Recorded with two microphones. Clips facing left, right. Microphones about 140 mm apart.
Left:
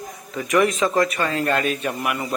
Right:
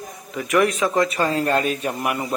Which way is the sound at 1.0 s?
35° right (ahead or behind).